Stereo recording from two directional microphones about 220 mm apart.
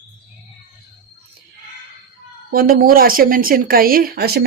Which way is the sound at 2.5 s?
40° right (ahead or behind).